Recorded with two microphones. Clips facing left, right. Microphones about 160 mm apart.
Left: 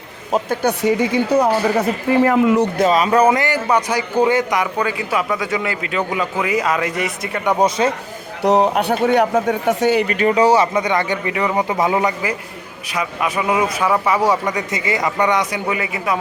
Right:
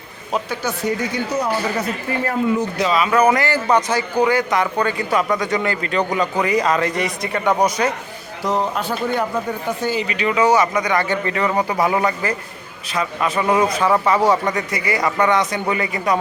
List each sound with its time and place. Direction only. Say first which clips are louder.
0.3 s speech: left 5 dB; 45° left (ahead or behind)
0.7 s a woman's voice: left 5 dB; 90° left
2.2 s speech: left 4 dB; 80° left
2.8 s speech: left 1 dB; 40° left (ahead or behind); by 4.0 s 10° left (ahead or behind)
4.2 s speech: left 2 dB; 20° left (ahead or behind)
4.6 s a man's voice: right 1 dB; 5° left (ahead or behind)
7.6 s speech: left 2 dB; 25° left (ahead or behind)
8.4 s speech: left 6 dB; 70° left (ahead or behind)
10.1 s a man's voice: left 3 dB; 45° left (ahead or behind); by 14.6 s 10° left (ahead or behind)
14.7 s a man's voice: even; 20° left (ahead or behind)